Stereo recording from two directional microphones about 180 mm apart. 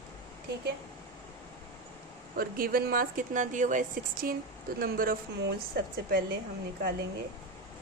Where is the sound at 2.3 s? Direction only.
55° right (ahead or behind).